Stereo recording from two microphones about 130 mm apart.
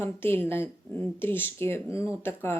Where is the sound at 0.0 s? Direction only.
15° left (ahead or behind).